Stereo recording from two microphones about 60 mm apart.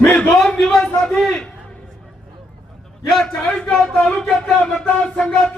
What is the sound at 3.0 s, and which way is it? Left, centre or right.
Speech, centre.